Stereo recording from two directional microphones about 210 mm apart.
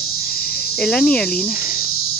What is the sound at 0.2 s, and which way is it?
Cricket, centre (ahead or behind).